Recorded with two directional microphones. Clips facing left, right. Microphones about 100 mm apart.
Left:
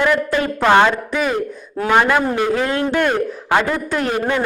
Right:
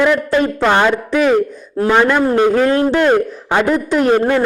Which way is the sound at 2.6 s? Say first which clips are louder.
Right 5 dB; 30° right (ahead or behind).